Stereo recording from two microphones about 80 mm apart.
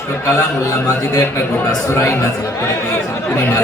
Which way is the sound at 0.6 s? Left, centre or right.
Left.